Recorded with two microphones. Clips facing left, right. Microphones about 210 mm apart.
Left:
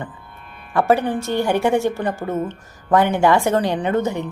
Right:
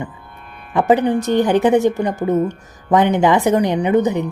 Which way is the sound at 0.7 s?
20° right (ahead or behind).